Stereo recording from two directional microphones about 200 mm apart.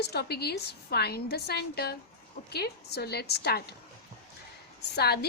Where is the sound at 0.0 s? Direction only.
55° left (ahead or behind).